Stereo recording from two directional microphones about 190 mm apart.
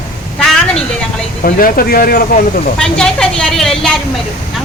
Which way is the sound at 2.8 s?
5° left (ahead or behind).